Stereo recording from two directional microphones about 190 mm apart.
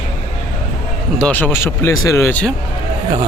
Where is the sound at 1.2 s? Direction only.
10° left (ahead or behind).